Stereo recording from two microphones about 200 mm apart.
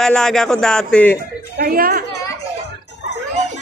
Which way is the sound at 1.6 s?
45° right (ahead or behind).